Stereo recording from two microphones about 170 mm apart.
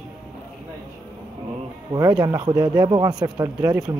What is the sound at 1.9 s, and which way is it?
Speech, 20° right (ahead or behind).